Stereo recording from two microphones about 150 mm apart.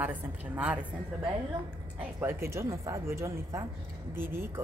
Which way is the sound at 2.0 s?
15° right (ahead or behind).